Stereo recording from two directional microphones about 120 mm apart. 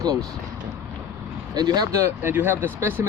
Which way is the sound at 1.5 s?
35° right (ahead or behind).